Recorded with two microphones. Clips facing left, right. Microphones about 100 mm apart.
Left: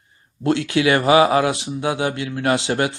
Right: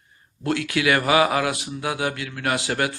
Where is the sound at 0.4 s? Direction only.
25° left (ahead or behind).